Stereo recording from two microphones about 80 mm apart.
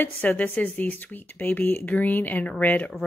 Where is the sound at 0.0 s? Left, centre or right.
Left.